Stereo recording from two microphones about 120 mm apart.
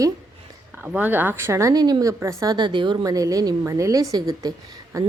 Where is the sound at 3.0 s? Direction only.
30° right (ahead or behind).